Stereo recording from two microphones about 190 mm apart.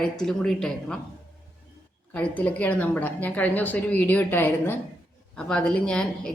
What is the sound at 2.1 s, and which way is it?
A woman's voice, 5° left (ahead or behind).